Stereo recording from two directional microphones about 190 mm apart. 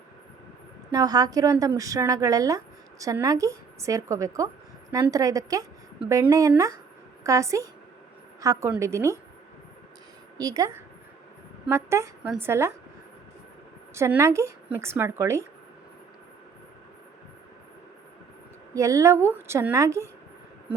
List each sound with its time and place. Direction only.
0.9 s a woman's voice: 20° right (ahead or behind)
10.3 s a woman's voice: 20° right (ahead or behind)
11.7 s a woman's voice: 15° right (ahead or behind)
13.9 s a woman's voice: 15° right (ahead or behind)
18.7 s a woman's voice: 15° right (ahead or behind)